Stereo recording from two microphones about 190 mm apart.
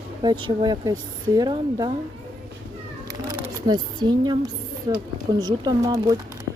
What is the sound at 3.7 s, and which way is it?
Speech, 20° right (ahead or behind).